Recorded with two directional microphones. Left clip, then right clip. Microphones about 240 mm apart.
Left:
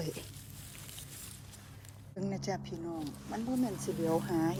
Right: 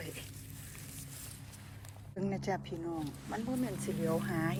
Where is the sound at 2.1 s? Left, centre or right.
Centre.